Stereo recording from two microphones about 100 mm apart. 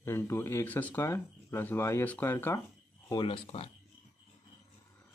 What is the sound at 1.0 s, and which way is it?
Speech, 25° left (ahead or behind).